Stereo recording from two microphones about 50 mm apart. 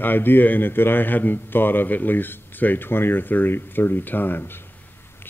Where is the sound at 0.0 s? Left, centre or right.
Left.